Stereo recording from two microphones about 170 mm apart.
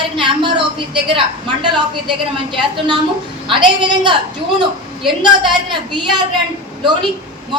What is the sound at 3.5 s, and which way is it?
A woman's voice, 30° right (ahead or behind).